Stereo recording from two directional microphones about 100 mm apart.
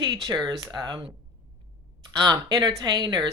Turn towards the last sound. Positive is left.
turn(degrees=-45)  # may be behind; listen again after turning